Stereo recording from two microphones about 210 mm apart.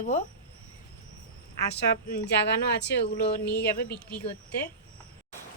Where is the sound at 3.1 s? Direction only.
50° left (ahead or behind).